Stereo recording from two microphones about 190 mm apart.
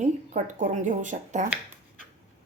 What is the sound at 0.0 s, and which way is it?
Speech, 40° right (ahead or behind).